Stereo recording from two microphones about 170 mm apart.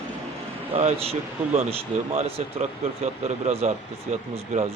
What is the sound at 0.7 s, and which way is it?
Speech, 35° right (ahead or behind).